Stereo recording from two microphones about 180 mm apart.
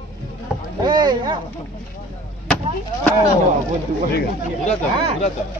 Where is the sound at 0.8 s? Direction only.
25° right (ahead or behind).